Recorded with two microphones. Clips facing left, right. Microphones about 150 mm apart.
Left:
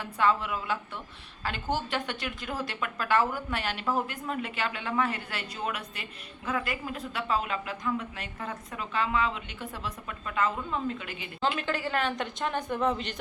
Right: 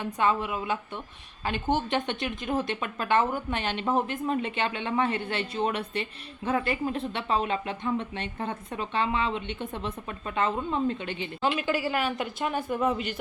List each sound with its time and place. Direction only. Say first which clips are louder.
0.0 s speech: right 1 dB; 20° right (ahead or behind)
11.4 s speech: right 3 dB; 10° right (ahead or behind)